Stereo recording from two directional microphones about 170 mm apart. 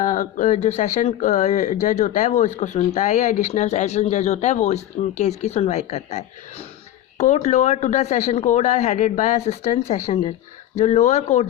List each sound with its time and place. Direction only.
0.0 s speech: 50° left (ahead or behind)